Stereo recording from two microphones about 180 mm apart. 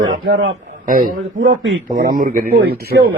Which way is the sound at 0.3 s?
90° right.